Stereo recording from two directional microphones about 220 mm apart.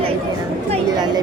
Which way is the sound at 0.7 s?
20° right (ahead or behind).